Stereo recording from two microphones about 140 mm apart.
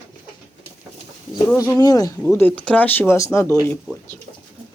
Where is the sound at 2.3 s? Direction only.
10° left (ahead or behind).